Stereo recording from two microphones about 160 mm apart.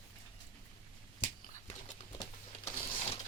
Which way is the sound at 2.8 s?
40° left (ahead or behind).